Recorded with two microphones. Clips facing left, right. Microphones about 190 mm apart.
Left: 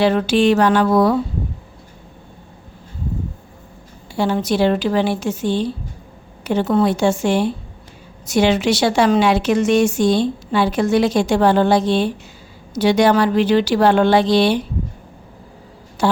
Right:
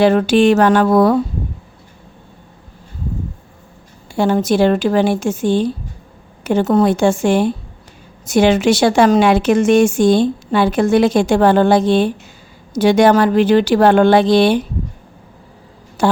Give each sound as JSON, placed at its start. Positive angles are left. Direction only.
{"t": 0.0, "sound": "a woman's voice", "side_deg": -50}
{"t": 4.1, "sound": "a woman's voice", "side_deg": -50}
{"t": 16.0, "sound": "speech", "side_deg": -50}